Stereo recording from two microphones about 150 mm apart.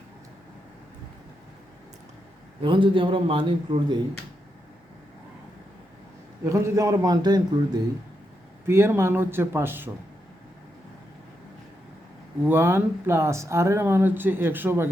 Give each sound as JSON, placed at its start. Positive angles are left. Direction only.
{"t": 2.6, "sound": "a man's voice", "side_deg": -35}
{"t": 6.4, "sound": "a man's voice", "side_deg": -20}
{"t": 8.6, "sound": "speech", "side_deg": -15}
{"t": 12.5, "sound": "speech", "side_deg": -15}